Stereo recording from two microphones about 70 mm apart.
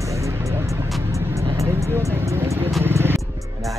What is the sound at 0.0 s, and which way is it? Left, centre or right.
Vehicle, right.